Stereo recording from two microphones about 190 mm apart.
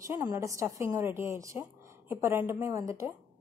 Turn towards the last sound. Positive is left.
turn(degrees=-15)  # may be behind; listen again after turning